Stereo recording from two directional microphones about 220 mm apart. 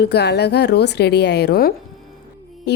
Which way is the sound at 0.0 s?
50° left (ahead or behind).